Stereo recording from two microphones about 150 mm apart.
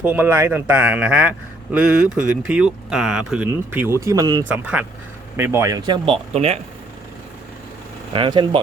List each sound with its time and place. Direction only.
0.0 s speech: 15° right (ahead or behind)
4.4 s speech: 10° right (ahead or behind); by 6.1 s 30° right (ahead or behind)
6.3 s speech: 45° right (ahead or behind)
8.1 s speech: 30° right (ahead or behind)